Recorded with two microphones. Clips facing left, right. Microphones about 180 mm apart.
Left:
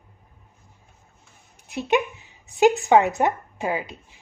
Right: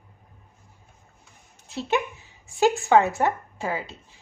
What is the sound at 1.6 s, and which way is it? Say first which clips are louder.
A woman's voice: left 3 dB; 15° left (ahead or behind).